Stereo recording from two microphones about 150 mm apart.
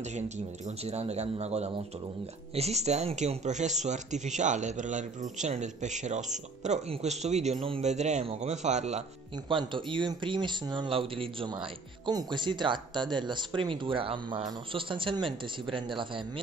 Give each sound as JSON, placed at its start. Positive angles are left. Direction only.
{"t": 0.7, "sound": "speech", "side_deg": -45}
{"t": 9.5, "sound": "speech", "side_deg": -30}